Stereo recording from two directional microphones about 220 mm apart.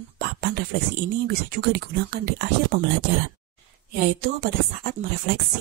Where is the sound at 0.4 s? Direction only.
45° right (ahead or behind).